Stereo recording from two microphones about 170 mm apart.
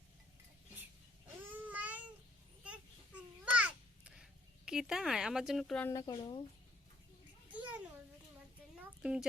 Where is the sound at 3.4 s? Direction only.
5° right (ahead or behind).